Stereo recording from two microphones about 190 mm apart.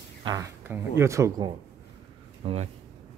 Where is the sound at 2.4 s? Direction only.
30° right (ahead or behind).